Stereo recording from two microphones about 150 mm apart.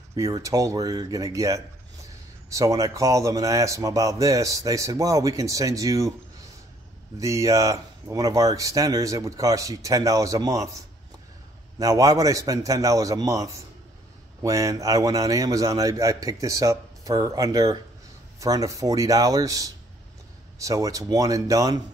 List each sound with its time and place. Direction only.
0.1 s speech: 20° right (ahead or behind)
7.2 s speech: 20° right (ahead or behind)
11.8 s speech: 20° right (ahead or behind)